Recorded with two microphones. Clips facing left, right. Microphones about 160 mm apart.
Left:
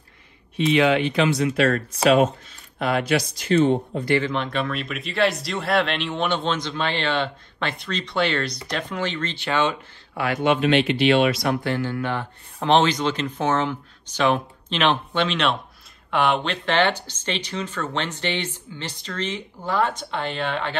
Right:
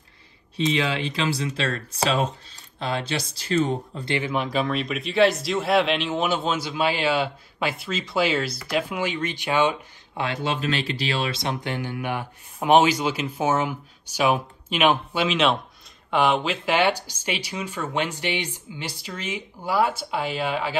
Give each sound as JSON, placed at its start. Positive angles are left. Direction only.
{"t": 0.9, "sound": "speech", "side_deg": -30}
{"t": 4.0, "sound": "speech", "side_deg": -20}
{"t": 4.3, "sound": "a man's voice", "side_deg": 0}
{"t": 10.1, "sound": "speech", "side_deg": -25}